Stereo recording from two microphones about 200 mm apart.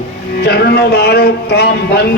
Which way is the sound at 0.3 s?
55° left (ahead or behind).